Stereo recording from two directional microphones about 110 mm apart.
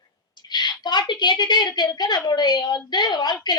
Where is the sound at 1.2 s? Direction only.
45° left (ahead or behind).